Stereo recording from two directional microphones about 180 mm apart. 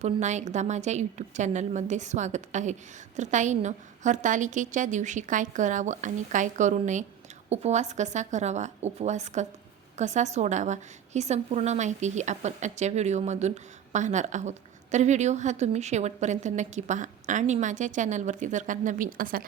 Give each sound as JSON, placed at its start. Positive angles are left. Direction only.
{"t": 0.0, "sound": "a woman's voice", "side_deg": -40}